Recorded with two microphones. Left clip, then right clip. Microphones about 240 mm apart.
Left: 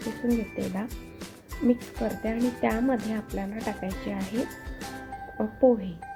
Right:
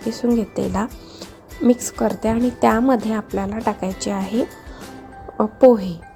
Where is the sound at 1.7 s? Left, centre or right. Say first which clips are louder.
Right 9 dB; right.